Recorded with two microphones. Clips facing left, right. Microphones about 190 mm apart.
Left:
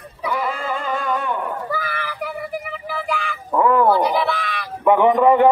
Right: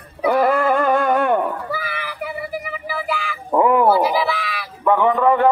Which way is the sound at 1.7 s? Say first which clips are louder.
Left 1 dB; 5° right (ahead or behind).